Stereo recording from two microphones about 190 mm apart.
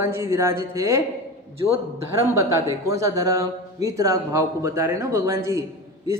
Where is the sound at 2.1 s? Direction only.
15° right (ahead or behind).